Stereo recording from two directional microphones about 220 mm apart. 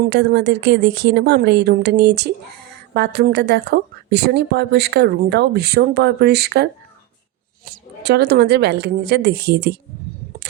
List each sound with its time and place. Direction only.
0.0 s a woman's voice: 50° right (ahead or behind)